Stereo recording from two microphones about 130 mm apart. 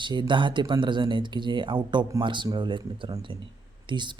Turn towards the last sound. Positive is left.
turn(degrees=-35)  # may be behind; listen again after turning